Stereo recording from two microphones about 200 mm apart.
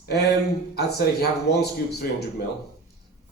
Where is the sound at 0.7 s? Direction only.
55° left (ahead or behind).